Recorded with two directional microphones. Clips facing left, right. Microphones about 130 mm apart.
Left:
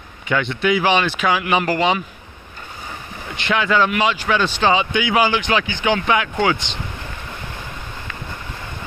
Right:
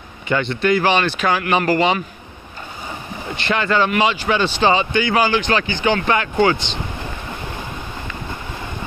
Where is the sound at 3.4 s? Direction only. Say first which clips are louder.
Even; centre (ahead or behind).